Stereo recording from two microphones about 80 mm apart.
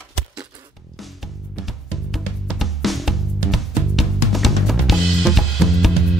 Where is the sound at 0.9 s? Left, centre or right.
Centre.